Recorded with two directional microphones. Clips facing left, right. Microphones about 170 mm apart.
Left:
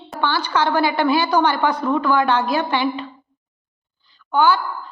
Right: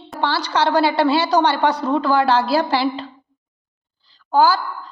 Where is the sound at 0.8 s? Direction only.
30° right (ahead or behind).